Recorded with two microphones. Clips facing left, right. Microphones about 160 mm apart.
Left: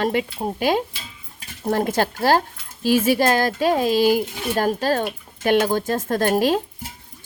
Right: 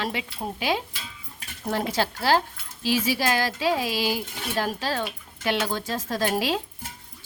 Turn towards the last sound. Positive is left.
turn(degrees=50)  # may be behind; listen again after turning